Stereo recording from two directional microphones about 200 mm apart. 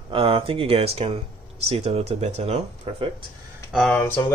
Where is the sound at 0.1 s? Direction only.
30° right (ahead or behind).